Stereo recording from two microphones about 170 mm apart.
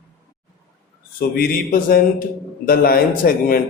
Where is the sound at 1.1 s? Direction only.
65° left (ahead or behind).